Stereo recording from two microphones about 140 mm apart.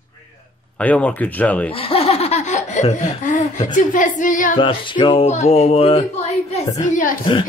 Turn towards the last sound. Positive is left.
turn(degrees=70)  # may be behind; listen again after turning